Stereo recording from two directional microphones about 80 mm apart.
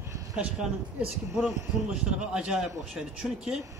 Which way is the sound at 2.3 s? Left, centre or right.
Centre.